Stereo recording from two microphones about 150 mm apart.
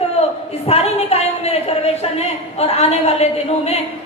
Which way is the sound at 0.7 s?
45° left (ahead or behind).